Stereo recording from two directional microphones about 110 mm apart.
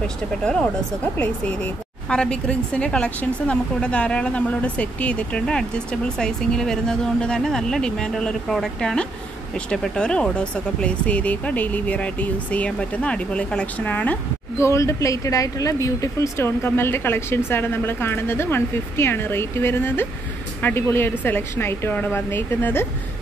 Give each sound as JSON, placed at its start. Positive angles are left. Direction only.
{"t": 1.1, "sound": "speech", "side_deg": 10}
{"t": 14.6, "sound": "speech", "side_deg": 25}